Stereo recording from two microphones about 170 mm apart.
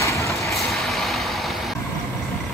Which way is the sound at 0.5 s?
Centre (ahead or behind).